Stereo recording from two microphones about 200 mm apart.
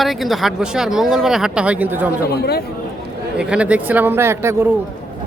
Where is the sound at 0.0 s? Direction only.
Centre (ahead or behind).